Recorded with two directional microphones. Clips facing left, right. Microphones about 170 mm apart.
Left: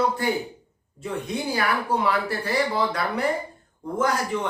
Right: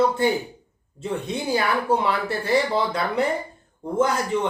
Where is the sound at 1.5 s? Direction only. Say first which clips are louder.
Right 4 dB; 25° right (ahead or behind).